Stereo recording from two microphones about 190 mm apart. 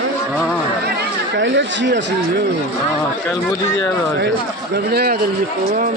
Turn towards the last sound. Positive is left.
turn(degrees=-55)  # may be behind; listen again after turning